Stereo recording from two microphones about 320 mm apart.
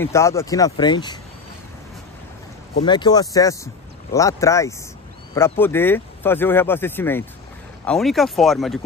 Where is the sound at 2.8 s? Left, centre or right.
Centre.